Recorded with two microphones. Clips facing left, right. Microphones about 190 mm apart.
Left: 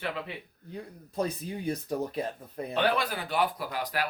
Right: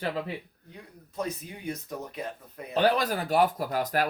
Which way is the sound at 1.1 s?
35° left (ahead or behind).